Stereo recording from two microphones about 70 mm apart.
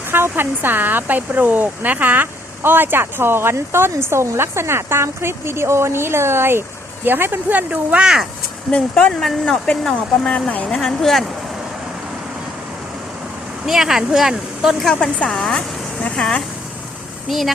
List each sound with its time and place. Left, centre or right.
0.1 s speech: right; by 8.3 s centre
8.7 s a woman's voice: centre
10.2 s a woman's voice: centre
10.7 s speech: centre
13.7 s speech: centre
15.0 s a woman's voice: centre
17.2 s speech: centre